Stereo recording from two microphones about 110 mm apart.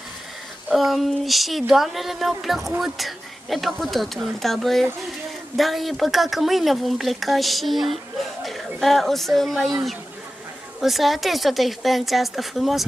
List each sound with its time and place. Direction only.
0.7 s speech: centre (ahead or behind)
10.8 s speech: centre (ahead or behind)